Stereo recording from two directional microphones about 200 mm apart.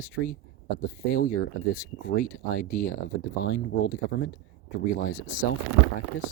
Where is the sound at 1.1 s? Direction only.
50° left (ahead or behind).